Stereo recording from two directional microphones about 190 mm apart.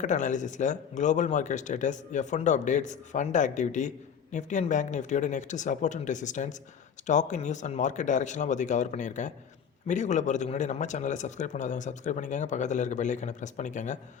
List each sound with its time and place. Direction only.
0.0 s speech: 40° left (ahead or behind)